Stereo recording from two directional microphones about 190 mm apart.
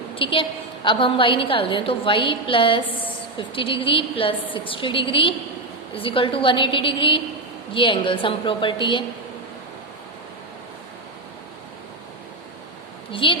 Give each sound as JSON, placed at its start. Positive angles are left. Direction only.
{"t": 0.2, "sound": "a woman's voice", "side_deg": 25}
{"t": 13.1, "sound": "a woman's voice", "side_deg": 25}